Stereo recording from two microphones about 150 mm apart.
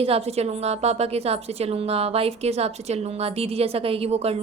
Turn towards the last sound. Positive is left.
turn(degrees=-45)  # may be behind; listen again after turning